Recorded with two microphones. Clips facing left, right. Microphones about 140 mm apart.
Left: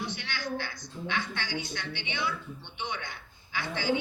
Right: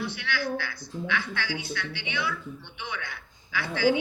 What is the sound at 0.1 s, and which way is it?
Speech, 25° left (ahead or behind).